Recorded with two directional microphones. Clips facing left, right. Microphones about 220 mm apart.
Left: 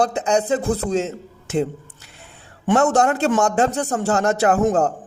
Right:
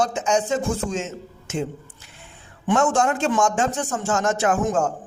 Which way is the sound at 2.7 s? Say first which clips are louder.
Left 3 dB; 40° left (ahead or behind).